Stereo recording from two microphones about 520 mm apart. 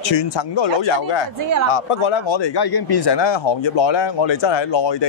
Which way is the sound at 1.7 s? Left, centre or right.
Left.